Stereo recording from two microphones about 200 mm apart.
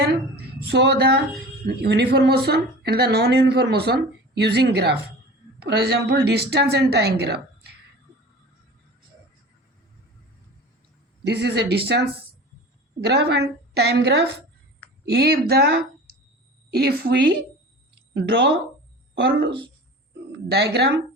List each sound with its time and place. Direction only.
0.7 s a woman's voice: 55° right (ahead or behind)
11.2 s a woman's voice: 55° right (ahead or behind)
13.1 s a woman's voice: 55° right (ahead or behind)